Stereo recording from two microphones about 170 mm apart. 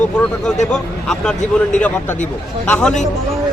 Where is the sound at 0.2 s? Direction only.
5° left (ahead or behind).